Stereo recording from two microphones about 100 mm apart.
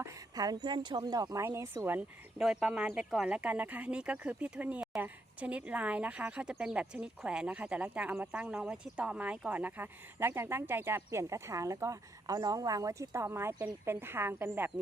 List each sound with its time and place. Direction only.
0.0 s speech: 40° right (ahead or behind)
2.0 s speech: 5° right (ahead or behind)